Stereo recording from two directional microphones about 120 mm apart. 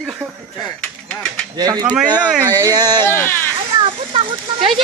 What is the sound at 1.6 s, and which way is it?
Speech, 35° right (ahead or behind).